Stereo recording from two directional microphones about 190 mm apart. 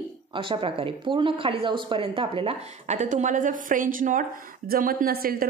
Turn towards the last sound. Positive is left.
turn(degrees=-50)  # may be behind; listen again after turning